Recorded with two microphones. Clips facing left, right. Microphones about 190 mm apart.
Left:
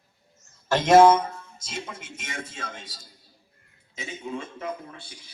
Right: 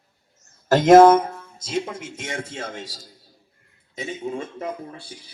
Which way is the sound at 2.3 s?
75° right (ahead or behind).